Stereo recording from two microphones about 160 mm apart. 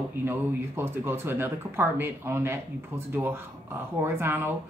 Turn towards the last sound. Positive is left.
turn(degrees=-15)  # may be behind; listen again after turning